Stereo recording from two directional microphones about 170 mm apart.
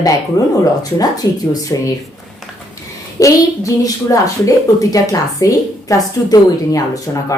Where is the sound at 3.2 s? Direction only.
20° left (ahead or behind).